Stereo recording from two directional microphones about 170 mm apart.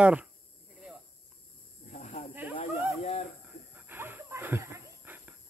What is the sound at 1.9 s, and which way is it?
Snake, 45° left (ahead or behind).